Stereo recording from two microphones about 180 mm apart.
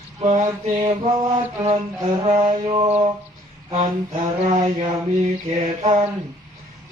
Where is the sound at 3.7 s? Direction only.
40° right (ahead or behind).